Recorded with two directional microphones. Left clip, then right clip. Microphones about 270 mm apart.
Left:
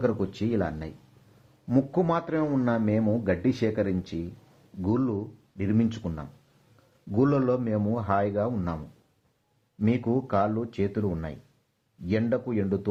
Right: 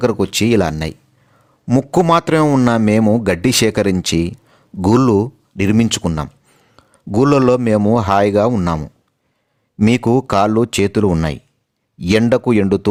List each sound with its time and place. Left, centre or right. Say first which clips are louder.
0.0 s a man's voice: right 12 dB; right
9.8 s a man's voice: right 13 dB; right